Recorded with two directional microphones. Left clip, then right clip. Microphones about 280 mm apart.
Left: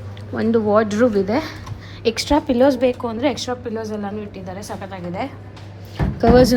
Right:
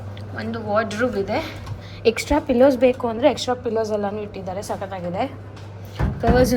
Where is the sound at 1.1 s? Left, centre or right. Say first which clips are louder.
Left 4 dB; centre.